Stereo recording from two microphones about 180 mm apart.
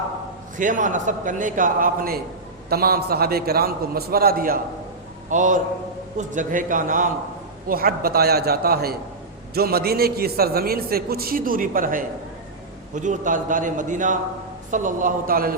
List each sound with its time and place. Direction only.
0.5 s a man's voice: 45° right (ahead or behind)